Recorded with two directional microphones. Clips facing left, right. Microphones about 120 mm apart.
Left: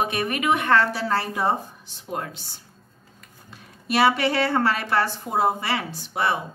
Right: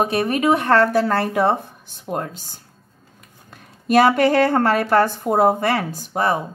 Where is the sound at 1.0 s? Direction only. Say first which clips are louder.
Right 5 dB; 55° right (ahead or behind).